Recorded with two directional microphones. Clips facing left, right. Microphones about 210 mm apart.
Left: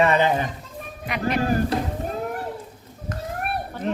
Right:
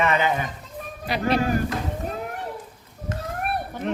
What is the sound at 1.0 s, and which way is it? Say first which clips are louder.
Speech: right 2 dB; 35° right (ahead or behind).